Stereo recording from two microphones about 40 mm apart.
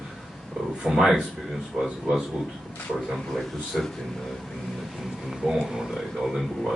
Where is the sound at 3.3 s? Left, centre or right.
Centre.